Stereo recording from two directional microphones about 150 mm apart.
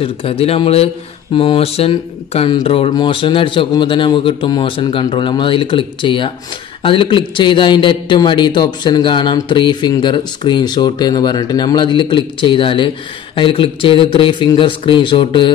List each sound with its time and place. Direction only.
0.0 s a man's voice: 40° left (ahead or behind)